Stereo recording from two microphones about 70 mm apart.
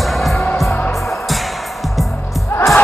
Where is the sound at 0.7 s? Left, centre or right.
Left.